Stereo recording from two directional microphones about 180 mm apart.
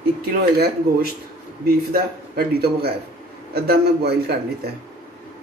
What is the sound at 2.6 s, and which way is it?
Speech, 60° right (ahead or behind).